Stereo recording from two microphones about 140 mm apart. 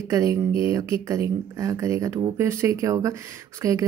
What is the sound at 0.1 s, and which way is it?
Speech, 25° right (ahead or behind).